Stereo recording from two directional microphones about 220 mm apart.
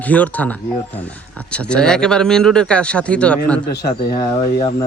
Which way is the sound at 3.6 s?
45° left (ahead or behind).